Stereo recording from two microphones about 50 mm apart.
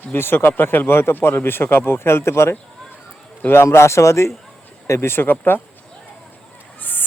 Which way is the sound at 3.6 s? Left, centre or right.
Left.